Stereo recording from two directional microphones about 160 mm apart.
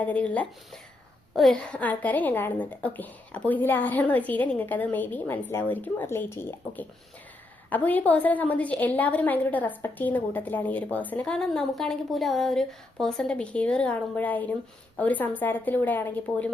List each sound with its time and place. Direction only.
0.0 s a woman's voice: 10° left (ahead or behind)